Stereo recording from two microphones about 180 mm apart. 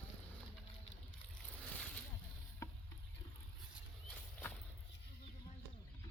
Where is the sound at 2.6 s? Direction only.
15° left (ahead or behind).